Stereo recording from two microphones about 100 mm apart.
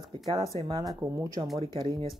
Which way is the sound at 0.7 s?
40° right (ahead or behind).